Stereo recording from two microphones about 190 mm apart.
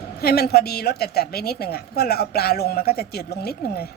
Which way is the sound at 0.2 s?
55° left (ahead or behind).